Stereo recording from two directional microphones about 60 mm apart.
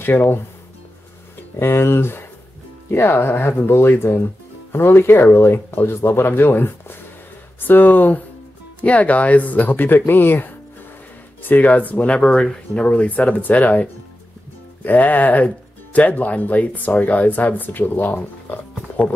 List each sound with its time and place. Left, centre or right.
0.0 s speech: left
1.6 s speech: left
19.0 s speech: left